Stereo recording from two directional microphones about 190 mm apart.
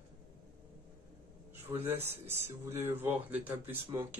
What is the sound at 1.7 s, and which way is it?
Speech, 10° right (ahead or behind).